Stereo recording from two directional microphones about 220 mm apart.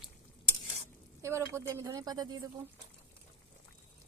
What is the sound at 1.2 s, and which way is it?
Speech, 10° right (ahead or behind).